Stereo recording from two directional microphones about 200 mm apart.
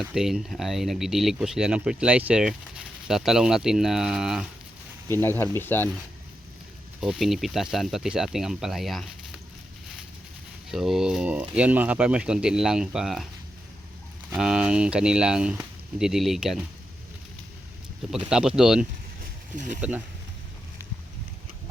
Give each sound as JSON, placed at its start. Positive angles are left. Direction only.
{"t": 0.0, "sound": "speech", "side_deg": 0}
{"t": 5.0, "sound": "speech", "side_deg": 10}
{"t": 7.0, "sound": "speech", "side_deg": 0}
{"t": 10.7, "sound": "speech", "side_deg": 0}
{"t": 14.3, "sound": "speech", "side_deg": -5}
{"t": 18.1, "sound": "speech", "side_deg": -5}
{"t": 19.2, "sound": "a sound", "side_deg": -40}